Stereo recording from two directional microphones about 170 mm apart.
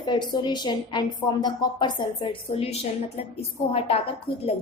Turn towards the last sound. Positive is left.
turn(degrees=35)  # may be behind; listen again after turning